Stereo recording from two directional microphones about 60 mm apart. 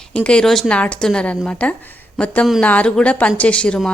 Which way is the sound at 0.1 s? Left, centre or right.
Centre.